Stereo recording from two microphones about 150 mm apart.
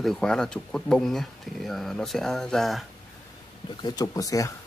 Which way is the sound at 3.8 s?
25° left (ahead or behind).